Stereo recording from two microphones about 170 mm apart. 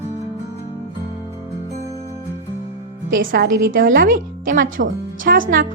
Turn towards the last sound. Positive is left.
turn(degrees=-55)  # may be behind; listen again after turning